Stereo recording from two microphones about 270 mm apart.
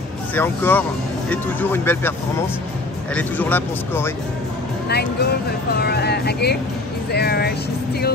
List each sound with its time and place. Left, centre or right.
0.3 s speech: centre
3.2 s speech: centre
4.8 s speech: left